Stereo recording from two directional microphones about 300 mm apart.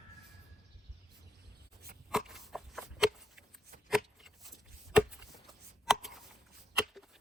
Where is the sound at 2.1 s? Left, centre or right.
Centre.